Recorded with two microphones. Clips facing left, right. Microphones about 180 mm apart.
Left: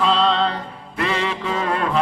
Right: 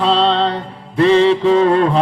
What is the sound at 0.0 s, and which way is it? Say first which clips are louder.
Music: right 4 dB; 30° right (ahead or behind).